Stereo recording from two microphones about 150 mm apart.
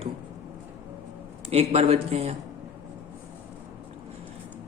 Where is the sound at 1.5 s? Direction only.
45° right (ahead or behind).